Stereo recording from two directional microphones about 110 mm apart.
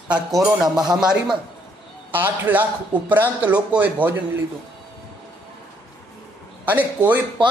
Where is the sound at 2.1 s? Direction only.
15° right (ahead or behind).